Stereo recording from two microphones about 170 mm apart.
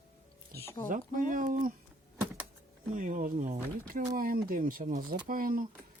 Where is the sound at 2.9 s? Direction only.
50° right (ahead or behind).